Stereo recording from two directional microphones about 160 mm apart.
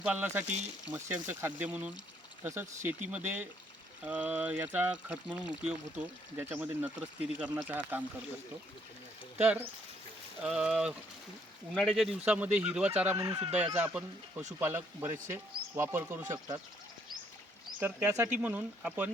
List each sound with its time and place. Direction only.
0.0 s speech: 10° right (ahead or behind)
9.4 s speech: 10° right (ahead or behind)
17.7 s speech: 10° right (ahead or behind)